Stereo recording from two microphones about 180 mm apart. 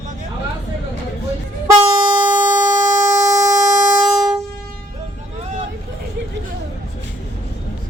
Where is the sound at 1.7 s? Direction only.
20° right (ahead or behind).